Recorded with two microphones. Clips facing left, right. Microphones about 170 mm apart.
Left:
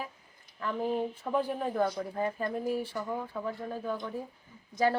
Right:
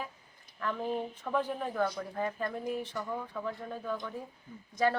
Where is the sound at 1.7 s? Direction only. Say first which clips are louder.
Left 2 dB; 20° left (ahead or behind).